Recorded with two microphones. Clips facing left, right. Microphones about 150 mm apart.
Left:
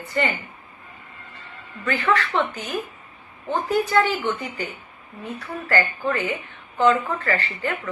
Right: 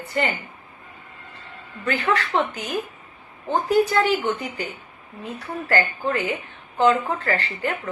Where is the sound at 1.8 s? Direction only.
35° right (ahead or behind).